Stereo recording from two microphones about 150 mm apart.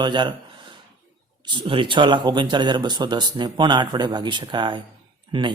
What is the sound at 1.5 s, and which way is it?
Speech, 35° right (ahead or behind).